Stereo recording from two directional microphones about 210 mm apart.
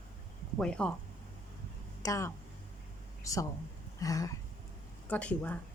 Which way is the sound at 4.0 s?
15° left (ahead or behind).